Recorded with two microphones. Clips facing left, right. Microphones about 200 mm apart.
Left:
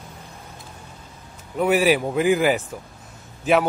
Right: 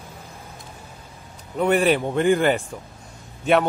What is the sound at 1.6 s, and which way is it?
A man's voice, 5° left (ahead or behind).